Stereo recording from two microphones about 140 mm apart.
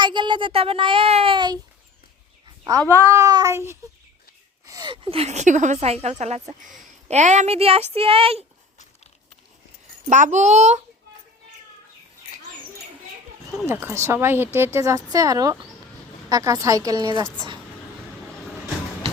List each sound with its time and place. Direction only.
0.0 s a child's voice: 35° right (ahead or behind)
2.9 s a woman's voice: 20° right (ahead or behind)
4.6 s gasp: 25° right (ahead or behind)
4.9 s speech: 45° right (ahead or behind)
10.1 s a child's voice: 60° right (ahead or behind)
13.7 s a woman's voice: 15° right (ahead or behind)